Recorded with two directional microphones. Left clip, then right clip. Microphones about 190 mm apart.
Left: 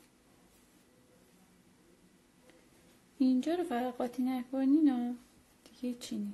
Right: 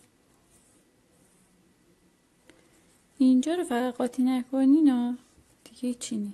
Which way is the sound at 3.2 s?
30° right (ahead or behind).